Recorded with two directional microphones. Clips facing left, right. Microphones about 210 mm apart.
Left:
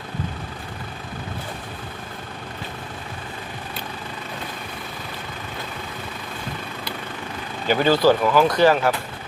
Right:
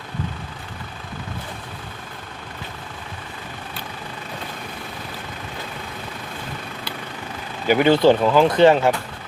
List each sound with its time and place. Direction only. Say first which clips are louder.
7.7 s speech: right 2 dB; 20° right (ahead or behind)